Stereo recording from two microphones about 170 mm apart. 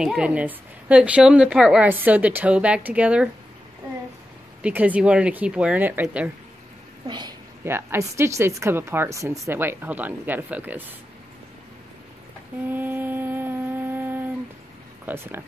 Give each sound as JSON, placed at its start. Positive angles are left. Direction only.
{"t": 0.0, "sound": "a woman's voice", "side_deg": -5}
{"t": 4.6, "sound": "a woman's voice", "side_deg": -10}
{"t": 7.1, "sound": "a woman's voice", "side_deg": -25}
{"t": 7.6, "sound": "a woman's voice", "side_deg": -15}
{"t": 12.6, "sound": "a sound", "side_deg": -10}
{"t": 15.0, "sound": "a woman's voice", "side_deg": -15}